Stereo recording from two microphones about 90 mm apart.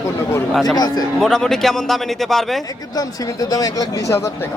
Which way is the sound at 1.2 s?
5° left (ahead or behind).